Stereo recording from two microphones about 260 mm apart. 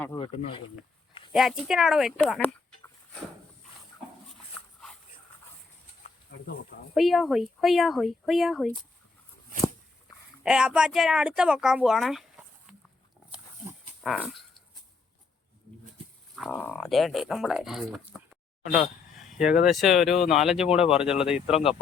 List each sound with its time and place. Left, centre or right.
0.0 s speech: centre
1.3 s speech: centre
6.9 s speech: centre
10.4 s speech: centre
13.3 s livestock: centre
16.3 s speech: centre
19.6 s speech: centre
21.4 s speech: left